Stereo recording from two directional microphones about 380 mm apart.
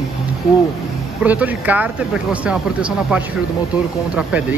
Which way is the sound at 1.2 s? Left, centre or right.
Centre.